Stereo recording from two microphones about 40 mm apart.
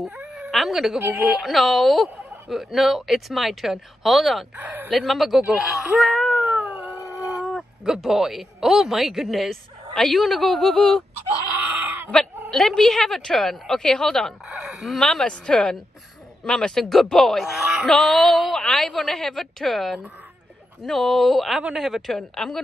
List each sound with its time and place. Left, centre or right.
0.5 s a woman's voice: centre
4.6 s a man's voice: right
4.9 s speech: centre
12.4 s a woman's voice: centre
14.6 s speech: centre
15.0 s a woman's voice: centre
17.4 s speech: centre
17.8 s a woman's voice: centre
22.3 s a woman's voice: centre